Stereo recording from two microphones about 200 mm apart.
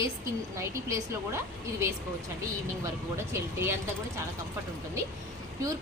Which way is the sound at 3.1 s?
10° right (ahead or behind).